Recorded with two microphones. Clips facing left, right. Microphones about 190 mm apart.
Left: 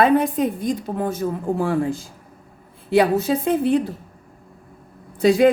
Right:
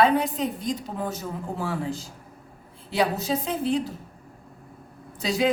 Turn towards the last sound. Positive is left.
turn(degrees=55)  # may be behind; listen again after turning